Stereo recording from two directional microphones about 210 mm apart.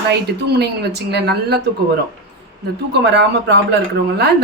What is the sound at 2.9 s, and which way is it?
Speech, 55° right (ahead or behind).